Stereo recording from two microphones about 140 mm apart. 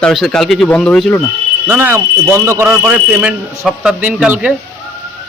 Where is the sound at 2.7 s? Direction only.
10° right (ahead or behind).